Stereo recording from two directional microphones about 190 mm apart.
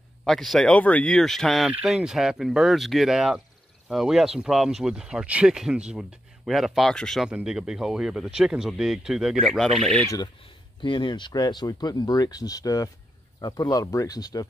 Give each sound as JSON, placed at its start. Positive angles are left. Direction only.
{"t": 0.2, "sound": "speech", "side_deg": 0}
{"t": 10.0, "sound": "speech", "side_deg": 20}